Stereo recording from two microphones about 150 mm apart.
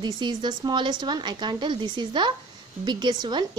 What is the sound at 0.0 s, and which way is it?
A woman's voice, 30° right (ahead or behind).